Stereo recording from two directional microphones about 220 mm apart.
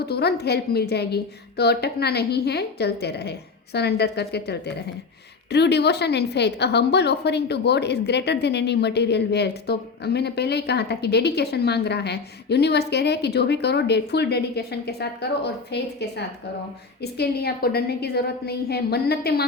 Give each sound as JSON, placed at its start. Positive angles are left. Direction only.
{"t": 0.0, "sound": "a woman's voice", "side_deg": 45}